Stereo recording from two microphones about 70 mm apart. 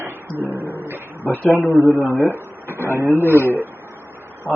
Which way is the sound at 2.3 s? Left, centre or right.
Right.